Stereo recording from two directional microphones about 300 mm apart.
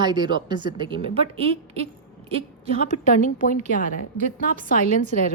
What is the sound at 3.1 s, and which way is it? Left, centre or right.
Speech, left.